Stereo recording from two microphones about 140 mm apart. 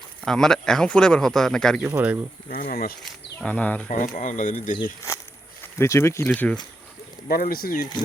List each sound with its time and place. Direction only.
0.3 s speech: 5° left (ahead or behind)
1.9 s speech: 10° right (ahead or behind)
2.5 s speech: 90° left
3.0 s speech: 10° left (ahead or behind)
3.8 s speech: 75° left (ahead or behind)
5.7 s speech: 20° left (ahead or behind)
7.3 s speech: 90° left